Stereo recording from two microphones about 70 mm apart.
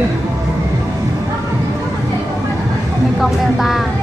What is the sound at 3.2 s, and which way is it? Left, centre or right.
Vehicle, centre.